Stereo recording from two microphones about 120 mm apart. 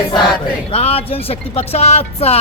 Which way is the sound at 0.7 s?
60° left (ahead or behind).